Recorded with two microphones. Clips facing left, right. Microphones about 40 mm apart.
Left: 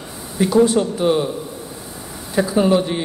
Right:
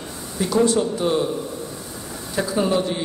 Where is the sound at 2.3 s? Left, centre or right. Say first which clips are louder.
Left 5 dB; left.